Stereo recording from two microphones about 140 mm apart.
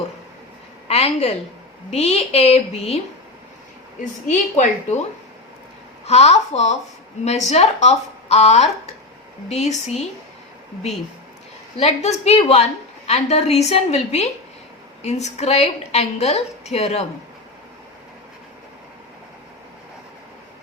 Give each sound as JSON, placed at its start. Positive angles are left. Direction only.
{"t": 0.9, "sound": "a sound", "side_deg": 45}
{"t": 1.9, "sound": "a woman's voice", "side_deg": 50}
{"t": 4.0, "sound": "a woman's voice", "side_deg": 60}
{"t": 6.1, "sound": "a woman's voice", "side_deg": 50}
{"t": 11.8, "sound": "a woman's voice", "side_deg": 50}